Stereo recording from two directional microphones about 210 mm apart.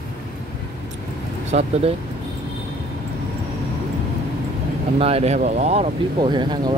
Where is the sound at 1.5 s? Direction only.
35° right (ahead or behind).